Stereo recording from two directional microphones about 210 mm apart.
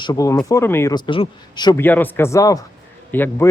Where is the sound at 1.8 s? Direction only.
10° left (ahead or behind).